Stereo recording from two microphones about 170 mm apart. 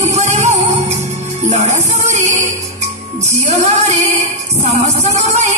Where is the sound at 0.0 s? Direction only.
40° right (ahead or behind).